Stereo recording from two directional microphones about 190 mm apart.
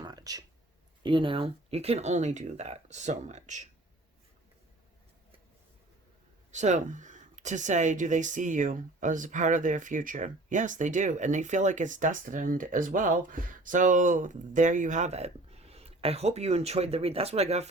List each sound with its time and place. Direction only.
0.0 s a sound: 20° right (ahead or behind)
1.0 s speech: 25° right (ahead or behind)
6.5 s speech: 40° right (ahead or behind)